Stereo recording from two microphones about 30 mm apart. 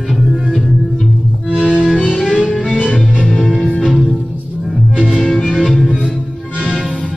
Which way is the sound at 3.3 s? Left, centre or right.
Centre.